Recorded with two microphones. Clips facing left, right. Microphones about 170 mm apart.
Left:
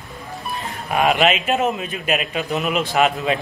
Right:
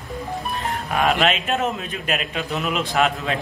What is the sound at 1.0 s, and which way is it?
A man's voice, 5° left (ahead or behind).